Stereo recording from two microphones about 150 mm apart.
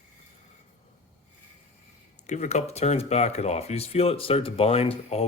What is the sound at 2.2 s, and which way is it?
Speech, 50° left (ahead or behind).